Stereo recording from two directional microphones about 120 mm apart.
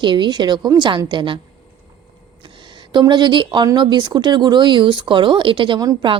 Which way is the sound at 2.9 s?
40° right (ahead or behind).